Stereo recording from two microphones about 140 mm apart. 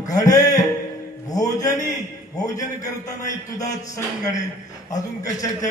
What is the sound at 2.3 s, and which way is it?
A man's voice, 25° left (ahead or behind).